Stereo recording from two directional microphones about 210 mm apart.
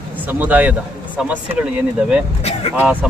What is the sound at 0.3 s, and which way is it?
Speech, 10° right (ahead or behind).